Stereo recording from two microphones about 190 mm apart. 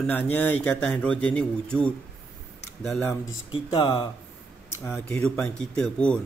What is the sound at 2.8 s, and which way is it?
Speech, centre (ahead or behind).